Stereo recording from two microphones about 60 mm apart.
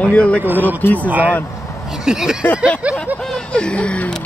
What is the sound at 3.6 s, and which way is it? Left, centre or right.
Speech, centre.